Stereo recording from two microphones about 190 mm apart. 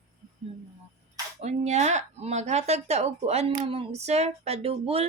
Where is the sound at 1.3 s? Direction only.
35° right (ahead or behind).